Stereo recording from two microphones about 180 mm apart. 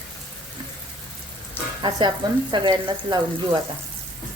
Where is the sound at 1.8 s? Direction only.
25° right (ahead or behind).